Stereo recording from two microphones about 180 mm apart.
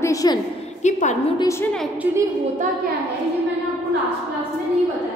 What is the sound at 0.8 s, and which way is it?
Speech, 40° left (ahead or behind).